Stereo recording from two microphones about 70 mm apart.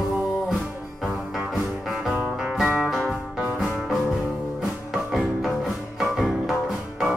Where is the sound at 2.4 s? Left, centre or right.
Centre.